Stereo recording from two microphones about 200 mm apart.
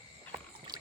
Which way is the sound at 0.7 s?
20° right (ahead or behind).